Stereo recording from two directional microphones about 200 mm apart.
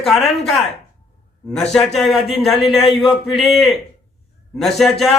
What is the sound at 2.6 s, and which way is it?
Speech, 30° left (ahead or behind).